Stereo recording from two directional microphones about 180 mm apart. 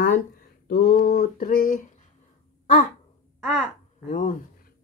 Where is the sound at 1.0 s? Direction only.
60° left (ahead or behind).